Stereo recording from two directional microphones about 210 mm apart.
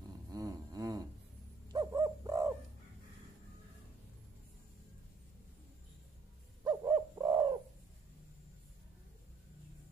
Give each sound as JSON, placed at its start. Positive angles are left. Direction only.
{"t": 0.3, "sound": "a sound", "side_deg": -15}
{"t": 1.7, "sound": "bird", "side_deg": -20}
{"t": 6.6, "sound": "bird", "side_deg": -15}